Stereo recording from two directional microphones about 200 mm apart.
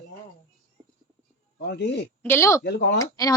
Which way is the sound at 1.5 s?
60° left (ahead or behind).